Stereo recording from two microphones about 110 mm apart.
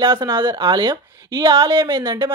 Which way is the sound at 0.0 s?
50° right (ahead or behind).